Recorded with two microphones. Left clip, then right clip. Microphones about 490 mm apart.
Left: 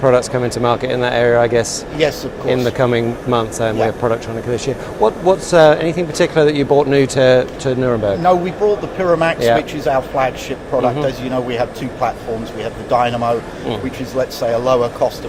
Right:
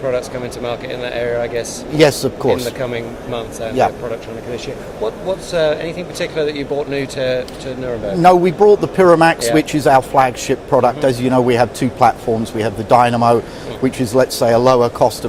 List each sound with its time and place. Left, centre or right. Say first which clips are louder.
0.0 s speech: left 6 dB; left
2.0 s a man's voice: right 5 dB; right
2.5 s speech: left 5 dB; left
8.2 s a man's voice: right 8 dB; right